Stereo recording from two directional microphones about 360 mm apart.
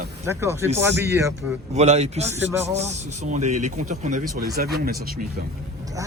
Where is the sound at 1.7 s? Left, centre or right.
Centre.